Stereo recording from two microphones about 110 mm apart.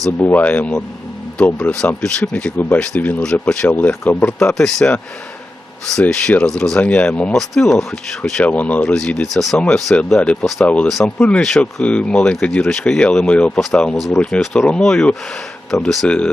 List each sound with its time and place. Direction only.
0.2 s speech: 15° left (ahead or behind)
4.5 s speech: 5° left (ahead or behind)